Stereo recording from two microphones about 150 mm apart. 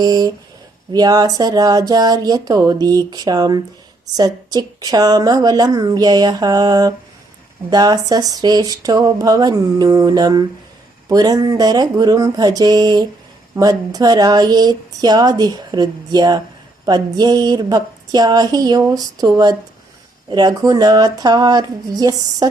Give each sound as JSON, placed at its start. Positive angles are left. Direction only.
{"t": 0.0, "sound": "speech", "side_deg": -25}